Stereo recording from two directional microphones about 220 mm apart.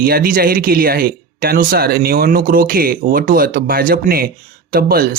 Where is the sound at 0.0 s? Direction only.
40° right (ahead or behind).